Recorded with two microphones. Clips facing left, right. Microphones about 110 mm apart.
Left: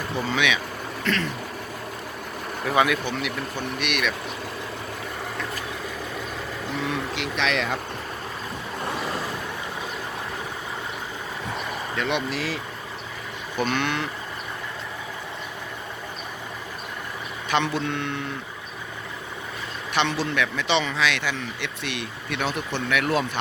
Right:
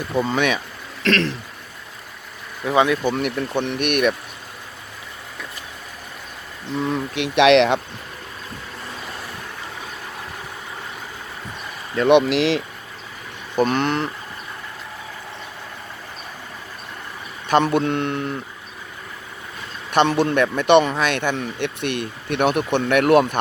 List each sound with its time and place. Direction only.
0.3 s speech: 45° right (ahead or behind)
1.0 s speech: 90° right
2.7 s speech: 30° right (ahead or behind)
3.0 s speech: 50° right (ahead or behind)
7.2 s speech: 65° right (ahead or behind)
12.0 s speech: 75° right (ahead or behind)
13.6 s speech: 40° right (ahead or behind)
17.5 s speech: 50° right (ahead or behind)
19.9 s speech: 50° right (ahead or behind)